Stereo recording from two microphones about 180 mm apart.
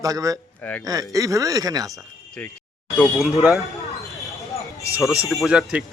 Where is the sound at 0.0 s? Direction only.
20° right (ahead or behind).